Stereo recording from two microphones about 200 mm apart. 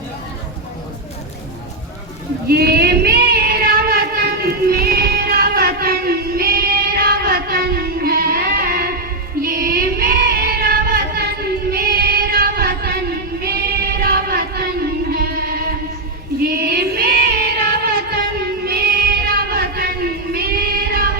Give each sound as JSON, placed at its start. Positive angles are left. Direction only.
{"t": 2.5, "sound": "a sound", "side_deg": -50}
{"t": 9.4, "sound": "female singing", "side_deg": -50}
{"t": 15.1, "sound": "music", "side_deg": -50}
{"t": 16.4, "sound": "child singing", "side_deg": -50}